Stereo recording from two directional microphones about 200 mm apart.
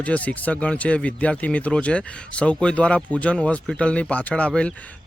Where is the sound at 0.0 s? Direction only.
5° left (ahead or behind).